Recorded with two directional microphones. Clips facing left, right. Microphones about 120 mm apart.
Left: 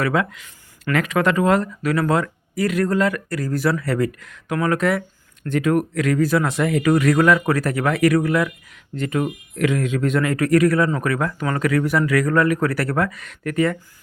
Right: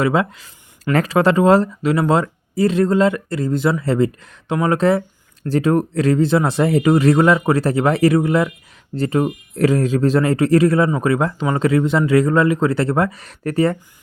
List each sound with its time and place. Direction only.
0.0 s speech: 25° right (ahead or behind)